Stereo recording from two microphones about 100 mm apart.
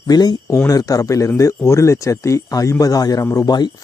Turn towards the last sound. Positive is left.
turn(degrees=30)  # may be behind; listen again after turning